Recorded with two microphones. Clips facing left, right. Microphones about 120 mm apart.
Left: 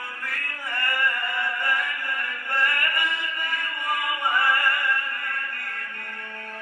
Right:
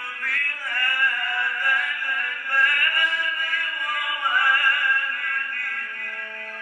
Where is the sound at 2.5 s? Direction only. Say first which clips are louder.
Right 1 dB; 25° left (ahead or behind).